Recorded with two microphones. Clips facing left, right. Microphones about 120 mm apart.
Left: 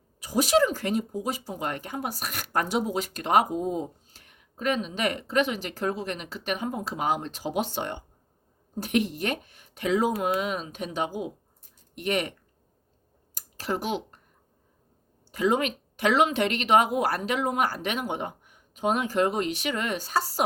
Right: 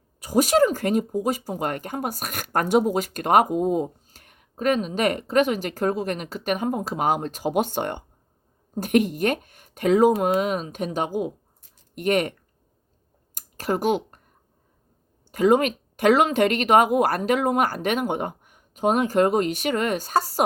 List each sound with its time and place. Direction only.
0.2 s speech: 45° right (ahead or behind)
13.3 s a sound: 45° right (ahead or behind)
15.3 s speech: 45° right (ahead or behind)